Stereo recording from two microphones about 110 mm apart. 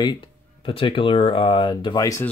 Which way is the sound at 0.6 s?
55° left (ahead or behind).